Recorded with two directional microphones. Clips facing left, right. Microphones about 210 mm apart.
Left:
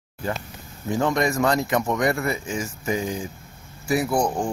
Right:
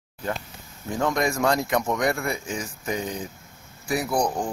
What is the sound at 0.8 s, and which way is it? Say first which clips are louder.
Speech: left 2 dB; centre (ahead or behind).